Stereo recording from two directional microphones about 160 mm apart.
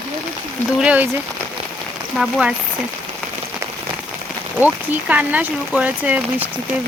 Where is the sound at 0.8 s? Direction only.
10° right (ahead or behind).